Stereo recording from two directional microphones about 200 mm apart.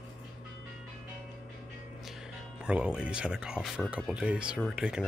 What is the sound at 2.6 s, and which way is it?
Speech, 5° right (ahead or behind).